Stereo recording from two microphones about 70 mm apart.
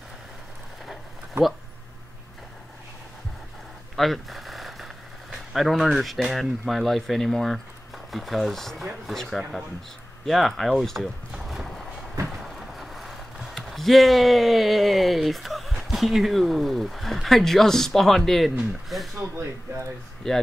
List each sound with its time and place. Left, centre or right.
1.4 s speech: right
3.9 s speech: centre
19.3 s speech: right
20.2 s speech: centre